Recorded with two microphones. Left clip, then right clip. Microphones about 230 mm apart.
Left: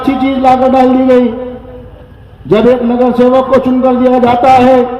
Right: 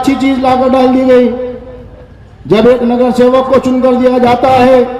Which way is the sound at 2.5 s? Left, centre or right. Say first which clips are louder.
Right 1 dB; right.